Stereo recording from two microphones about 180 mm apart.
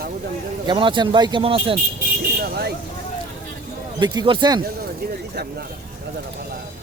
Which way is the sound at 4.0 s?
25° right (ahead or behind).